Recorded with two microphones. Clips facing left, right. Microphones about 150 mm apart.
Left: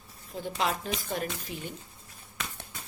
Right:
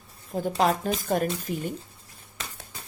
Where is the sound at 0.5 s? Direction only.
40° right (ahead or behind).